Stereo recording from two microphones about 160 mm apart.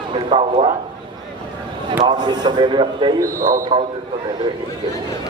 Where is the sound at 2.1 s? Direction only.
25° right (ahead or behind).